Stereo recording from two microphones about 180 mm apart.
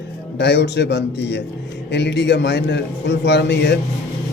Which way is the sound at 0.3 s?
70° left (ahead or behind).